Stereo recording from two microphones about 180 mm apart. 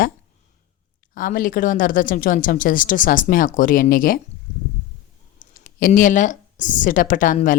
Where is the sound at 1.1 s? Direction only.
50° left (ahead or behind).